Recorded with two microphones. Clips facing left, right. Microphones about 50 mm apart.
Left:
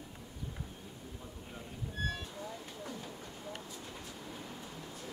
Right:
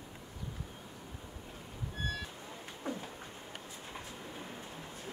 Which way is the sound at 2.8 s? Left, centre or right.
Right.